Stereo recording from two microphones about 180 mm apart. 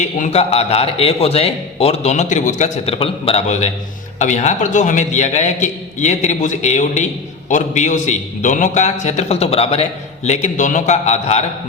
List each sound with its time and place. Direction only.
0.0 s a man's voice: 40° left (ahead or behind)